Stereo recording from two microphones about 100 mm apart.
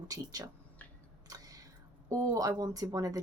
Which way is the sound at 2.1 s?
35° right (ahead or behind).